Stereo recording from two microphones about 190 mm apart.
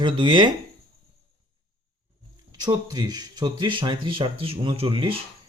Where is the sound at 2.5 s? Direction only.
20° right (ahead or behind).